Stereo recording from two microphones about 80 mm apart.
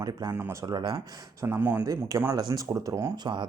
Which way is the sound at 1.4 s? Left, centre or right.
Right.